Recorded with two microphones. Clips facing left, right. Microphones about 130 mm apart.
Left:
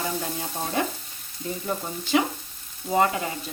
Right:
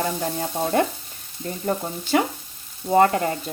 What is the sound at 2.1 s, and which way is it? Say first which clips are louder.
Stir: right 2 dB; 45° right (ahead or behind).